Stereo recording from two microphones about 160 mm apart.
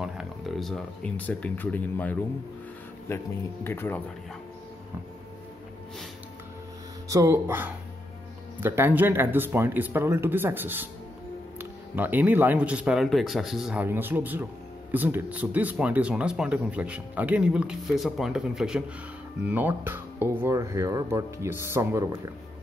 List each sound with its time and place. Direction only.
0.0 s speech: centre (ahead or behind)
7.1 s speech: 20° right (ahead or behind)
11.9 s speech: 10° right (ahead or behind)